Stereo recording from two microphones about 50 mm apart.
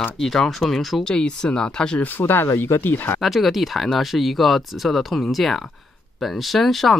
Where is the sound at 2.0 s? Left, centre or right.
Left.